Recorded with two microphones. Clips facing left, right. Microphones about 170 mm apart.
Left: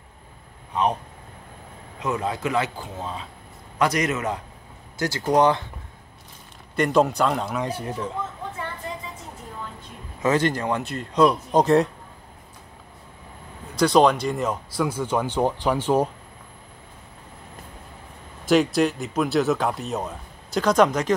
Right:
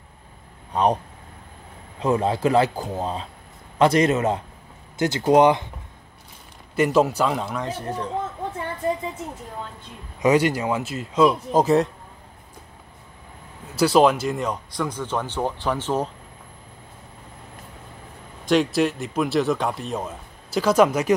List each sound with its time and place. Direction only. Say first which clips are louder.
2.0 s speech: right 5 dB; 30° right (ahead or behind)
6.7 s speech: right 1 dB; 5° right (ahead or behind)
7.6 s speech: even; 10° left (ahead or behind)
10.2 s speech: right 3 dB; 10° right (ahead or behind)
13.7 s speech: right 1 dB; 5° right (ahead or behind); by 16.1 s 10° left (ahead or behind)
18.4 s speech: left 1 dB; centre (ahead or behind)